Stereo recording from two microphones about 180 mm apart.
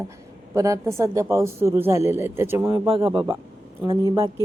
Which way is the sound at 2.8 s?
30° right (ahead or behind).